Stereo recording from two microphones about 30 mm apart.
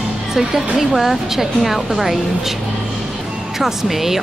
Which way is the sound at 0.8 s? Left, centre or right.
Centre.